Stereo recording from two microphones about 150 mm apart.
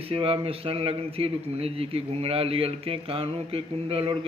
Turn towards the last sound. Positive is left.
turn(degrees=-35)  # may be behind; listen again after turning